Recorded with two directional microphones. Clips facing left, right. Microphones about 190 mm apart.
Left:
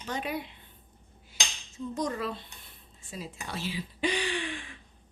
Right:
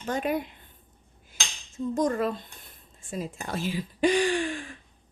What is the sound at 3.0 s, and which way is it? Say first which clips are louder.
Speech: right 7 dB; 50° right (ahead or behind).